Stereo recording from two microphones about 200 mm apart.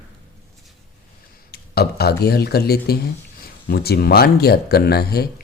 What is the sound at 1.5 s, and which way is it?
Speech, 50° left (ahead or behind).